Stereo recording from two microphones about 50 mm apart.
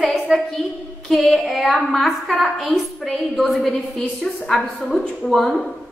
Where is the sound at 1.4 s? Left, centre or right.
Centre.